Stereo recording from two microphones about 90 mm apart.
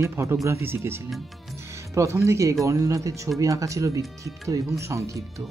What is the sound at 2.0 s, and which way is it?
Speech, 35° right (ahead or behind).